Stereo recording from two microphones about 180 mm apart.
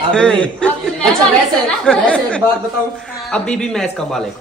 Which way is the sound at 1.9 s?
5° left (ahead or behind).